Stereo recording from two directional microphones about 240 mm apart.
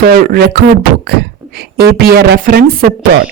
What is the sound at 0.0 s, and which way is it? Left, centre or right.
A woman's voice, right.